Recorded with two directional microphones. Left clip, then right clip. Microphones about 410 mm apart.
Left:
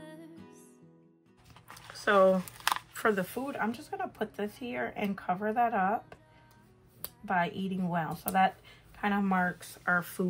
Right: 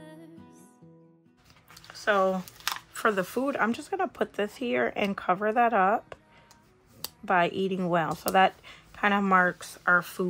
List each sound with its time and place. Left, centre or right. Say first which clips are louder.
0.0 s music: right 1 dB; centre
1.7 s speech: right 1 dB; centre
7.2 s speech: right 6 dB; centre